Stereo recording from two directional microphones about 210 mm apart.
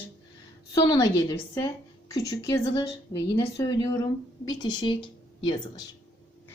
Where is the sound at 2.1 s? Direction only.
15° left (ahead or behind).